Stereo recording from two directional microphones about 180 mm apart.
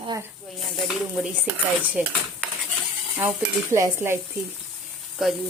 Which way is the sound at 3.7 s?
15° right (ahead or behind).